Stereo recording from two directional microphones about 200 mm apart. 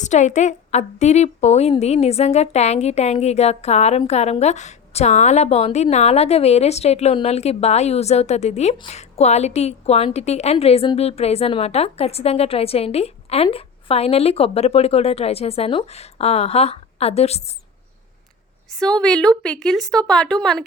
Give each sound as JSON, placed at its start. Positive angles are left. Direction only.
{"t": 0.0, "sound": "a woman's voice", "side_deg": 35}
{"t": 18.8, "sound": "speech", "side_deg": 5}